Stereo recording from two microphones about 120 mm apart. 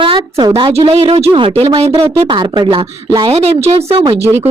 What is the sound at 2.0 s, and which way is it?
A woman's voice, 40° right (ahead or behind).